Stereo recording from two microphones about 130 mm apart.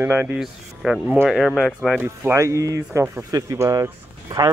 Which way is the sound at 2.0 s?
20° right (ahead or behind).